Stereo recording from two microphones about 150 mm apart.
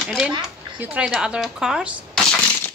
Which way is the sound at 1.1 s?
5° right (ahead or behind).